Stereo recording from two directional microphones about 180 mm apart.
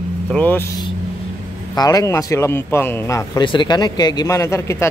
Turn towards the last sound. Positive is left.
turn(degrees=15)  # may be behind; listen again after turning